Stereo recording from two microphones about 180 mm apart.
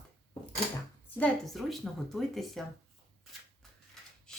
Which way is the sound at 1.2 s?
5° left (ahead or behind).